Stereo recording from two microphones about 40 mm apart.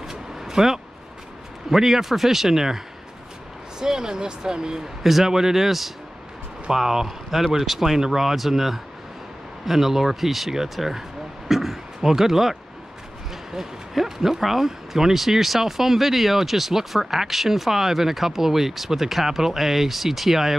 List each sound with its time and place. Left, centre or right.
0.0 s vehicle: centre
1.7 s speech: centre
3.8 s speech: centre
5.0 s speech: centre